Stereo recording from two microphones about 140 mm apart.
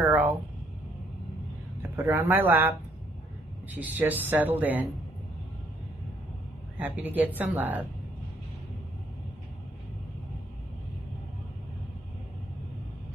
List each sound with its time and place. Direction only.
0.0 s a sound: 10° right (ahead or behind)
1.8 s speech: 15° right (ahead or behind)
3.7 s speech: 10° right (ahead or behind)
6.8 s speech: 10° right (ahead or behind)